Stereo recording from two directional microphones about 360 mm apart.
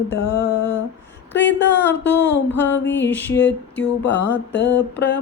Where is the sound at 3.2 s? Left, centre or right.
Left.